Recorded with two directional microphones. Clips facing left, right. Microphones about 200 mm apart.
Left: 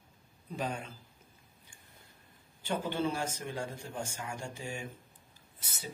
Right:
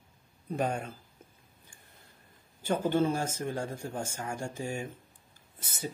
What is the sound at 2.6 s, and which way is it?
Speech, 45° right (ahead or behind).